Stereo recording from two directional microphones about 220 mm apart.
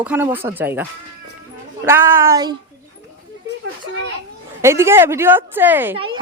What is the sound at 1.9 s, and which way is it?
Speech, 10° right (ahead or behind).